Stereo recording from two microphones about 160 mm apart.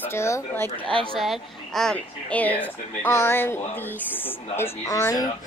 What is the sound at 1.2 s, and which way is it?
Speech, centre (ahead or behind).